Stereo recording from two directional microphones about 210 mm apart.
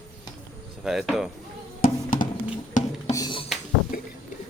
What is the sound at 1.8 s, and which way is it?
Music, 40° left (ahead or behind).